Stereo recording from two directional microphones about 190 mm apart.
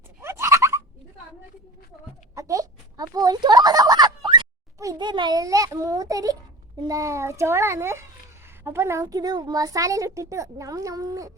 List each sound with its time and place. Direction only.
0.2 s a sound: 15° right (ahead or behind)
2.3 s fowl: 20° right (ahead or behind)
6.8 s a woman's voice: 15° right (ahead or behind)